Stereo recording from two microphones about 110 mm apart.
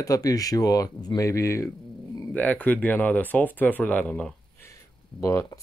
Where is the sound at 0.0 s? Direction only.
35° left (ahead or behind).